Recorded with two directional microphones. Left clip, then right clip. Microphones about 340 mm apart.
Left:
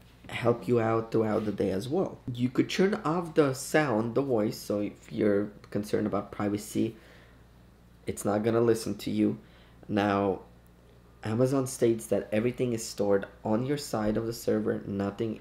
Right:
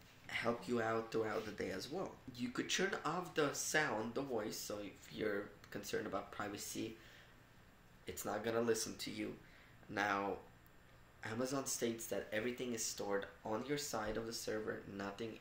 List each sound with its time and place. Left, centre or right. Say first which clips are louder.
0.3 s speech: left 13 dB; right
8.0 s speech: left 13 dB; right